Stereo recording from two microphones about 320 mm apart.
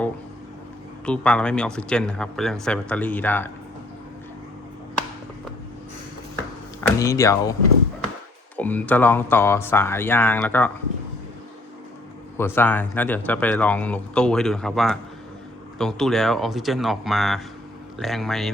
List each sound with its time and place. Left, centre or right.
1.0 s a man's voice: centre
7.0 s speech: centre
8.5 s speech: centre
12.4 s a man's voice: centre